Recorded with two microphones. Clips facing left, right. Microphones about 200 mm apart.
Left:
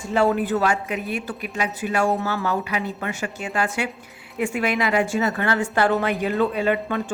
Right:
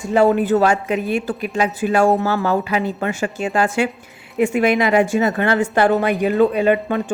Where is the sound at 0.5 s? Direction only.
30° right (ahead or behind).